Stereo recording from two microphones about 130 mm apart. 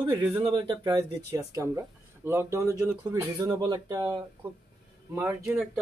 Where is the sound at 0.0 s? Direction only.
40° right (ahead or behind).